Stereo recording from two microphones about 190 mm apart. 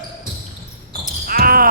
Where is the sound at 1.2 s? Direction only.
50° right (ahead or behind).